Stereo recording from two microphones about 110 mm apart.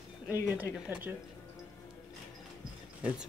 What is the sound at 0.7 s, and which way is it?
Speech, 15° right (ahead or behind).